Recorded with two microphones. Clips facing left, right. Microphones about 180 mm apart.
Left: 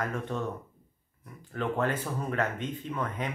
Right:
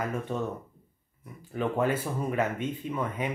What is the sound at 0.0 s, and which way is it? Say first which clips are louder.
Speech: right 1 dB; 10° right (ahead or behind).